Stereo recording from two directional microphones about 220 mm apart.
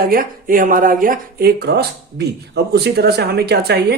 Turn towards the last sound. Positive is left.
turn(degrees=-50)  # may be behind; listen again after turning